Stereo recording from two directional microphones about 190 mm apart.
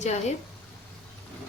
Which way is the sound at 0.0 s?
35° left (ahead or behind).